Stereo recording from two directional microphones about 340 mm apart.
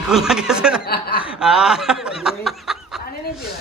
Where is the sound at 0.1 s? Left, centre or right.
Centre.